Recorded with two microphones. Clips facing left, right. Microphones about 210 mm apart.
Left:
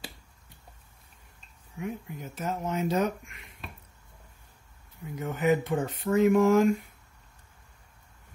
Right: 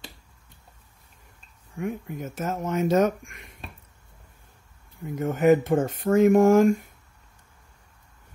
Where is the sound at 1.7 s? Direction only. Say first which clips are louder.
Right 5 dB; 50° right (ahead or behind).